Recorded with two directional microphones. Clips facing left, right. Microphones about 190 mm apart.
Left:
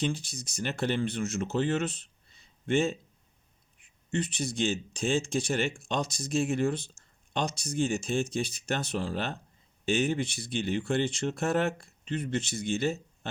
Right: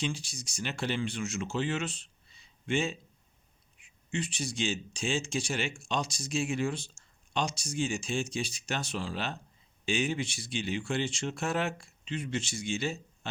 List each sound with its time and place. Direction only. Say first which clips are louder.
0.0 s speech: left 4 dB; 55° left (ahead or behind)
4.1 s speech: left 3 dB; 55° left (ahead or behind)